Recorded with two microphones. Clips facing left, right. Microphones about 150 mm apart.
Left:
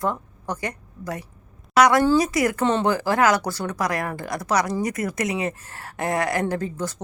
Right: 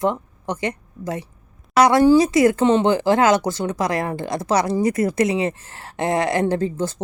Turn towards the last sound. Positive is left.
turn(degrees=-25)  # may be behind; listen again after turning